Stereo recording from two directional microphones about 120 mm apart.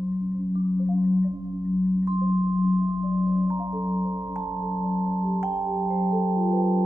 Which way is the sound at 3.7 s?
10° right (ahead or behind).